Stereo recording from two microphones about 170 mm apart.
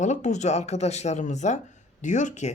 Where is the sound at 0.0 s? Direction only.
45° left (ahead or behind).